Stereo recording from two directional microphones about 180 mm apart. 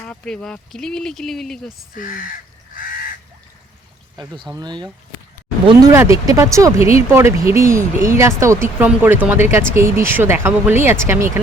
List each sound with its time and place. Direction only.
0.0 s speech: 5° left (ahead or behind)
2.0 s speech: 50° left (ahead or behind)
4.2 s speech: 25° right (ahead or behind)
6.7 s speech: 35° left (ahead or behind)
7.1 s speech: 15° right (ahead or behind)